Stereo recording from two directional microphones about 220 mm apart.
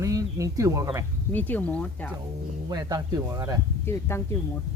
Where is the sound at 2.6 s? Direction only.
15° right (ahead or behind).